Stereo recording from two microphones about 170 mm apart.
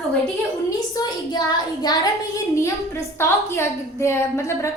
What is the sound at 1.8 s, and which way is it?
A woman's voice, 20° left (ahead or behind).